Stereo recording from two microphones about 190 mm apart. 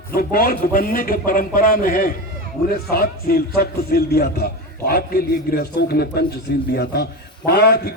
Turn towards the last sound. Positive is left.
turn(degrees=55)  # may be behind; listen again after turning